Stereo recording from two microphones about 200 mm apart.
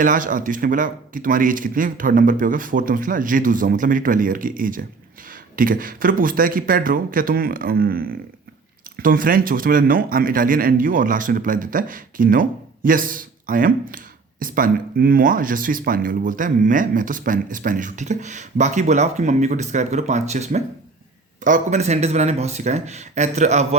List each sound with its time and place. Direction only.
0.0 s a man's voice: 40° right (ahead or behind)